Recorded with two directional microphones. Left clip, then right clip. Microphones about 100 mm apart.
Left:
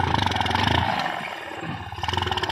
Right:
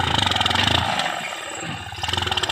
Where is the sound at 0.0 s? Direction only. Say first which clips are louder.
Right 3 dB; 30° left (ahead or behind).